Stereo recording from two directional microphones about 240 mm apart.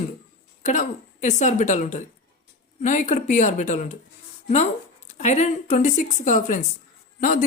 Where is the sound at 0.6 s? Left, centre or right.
Left.